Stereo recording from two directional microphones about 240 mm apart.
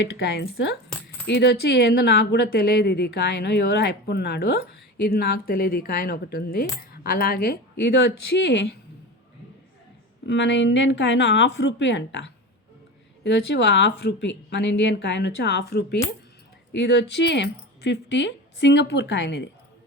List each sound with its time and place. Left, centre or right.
0.0 s speech: left
10.2 s speech: left